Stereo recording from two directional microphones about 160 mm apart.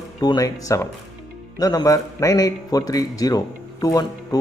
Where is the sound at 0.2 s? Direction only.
25° left (ahead or behind).